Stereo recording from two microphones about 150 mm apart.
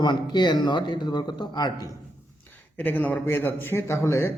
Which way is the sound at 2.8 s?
10° left (ahead or behind).